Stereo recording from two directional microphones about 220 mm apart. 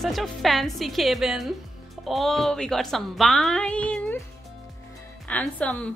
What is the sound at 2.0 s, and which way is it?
A woman's voice, centre (ahead or behind).